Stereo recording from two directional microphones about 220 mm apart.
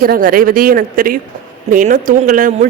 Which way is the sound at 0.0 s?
40° right (ahead or behind).